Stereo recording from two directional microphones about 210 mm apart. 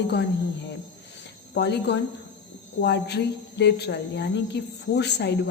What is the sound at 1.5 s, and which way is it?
Speech, 55° left (ahead or behind).